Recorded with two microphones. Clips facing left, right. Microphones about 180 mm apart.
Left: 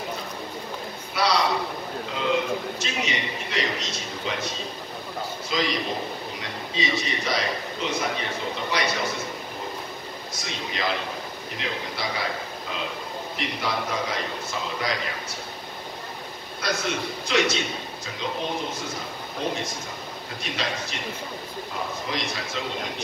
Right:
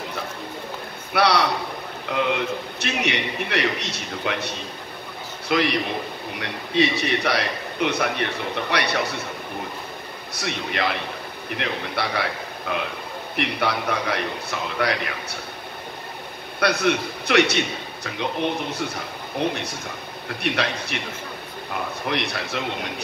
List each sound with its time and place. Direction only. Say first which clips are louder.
1.1 s a man's voice: right 3 dB; 65° right (ahead or behind)
10.3 s a man's voice: right 7 dB; 65° right (ahead or behind)
16.5 s a man's voice: right 7 dB; 65° right (ahead or behind)
22.0 s a man's voice: right 4 dB; 65° right (ahead or behind)